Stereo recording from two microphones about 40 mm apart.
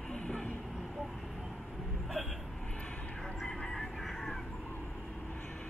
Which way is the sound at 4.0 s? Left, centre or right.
Centre.